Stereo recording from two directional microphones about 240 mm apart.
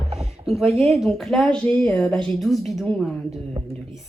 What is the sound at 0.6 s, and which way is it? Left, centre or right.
Speech, right.